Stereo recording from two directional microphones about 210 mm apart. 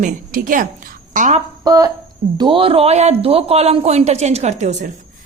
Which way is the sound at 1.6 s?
20° right (ahead or behind).